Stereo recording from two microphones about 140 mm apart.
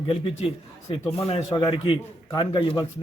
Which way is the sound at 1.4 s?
30° left (ahead or behind).